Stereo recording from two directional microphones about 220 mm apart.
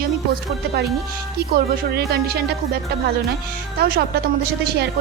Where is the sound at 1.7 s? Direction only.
45° right (ahead or behind).